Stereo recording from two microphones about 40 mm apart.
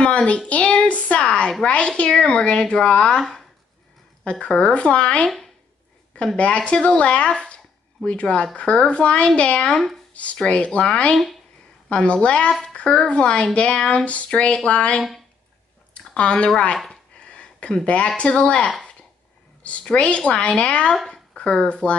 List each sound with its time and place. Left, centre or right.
0.0 s a sound: left
1.6 s a woman's voice: left
4.3 s a woman's voice: left
6.3 s a woman's voice: left
11.9 s a woman's voice: left
16.2 s a woman's voice: left
16.7 s a sound: centre
17.3 s a sound: left
17.8 s a woman's voice: left